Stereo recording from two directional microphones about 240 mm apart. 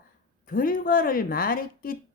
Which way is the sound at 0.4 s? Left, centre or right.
Left.